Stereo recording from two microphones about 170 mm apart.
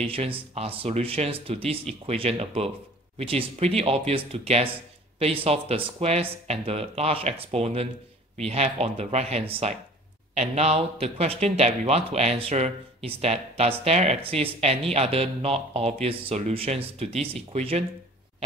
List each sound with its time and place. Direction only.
0.0 s speech: 35° right (ahead or behind)